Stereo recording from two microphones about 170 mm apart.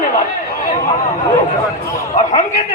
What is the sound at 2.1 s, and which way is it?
Speech, 45° left (ahead or behind).